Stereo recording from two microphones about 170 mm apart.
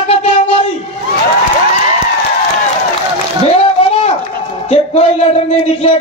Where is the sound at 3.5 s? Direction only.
35° left (ahead or behind).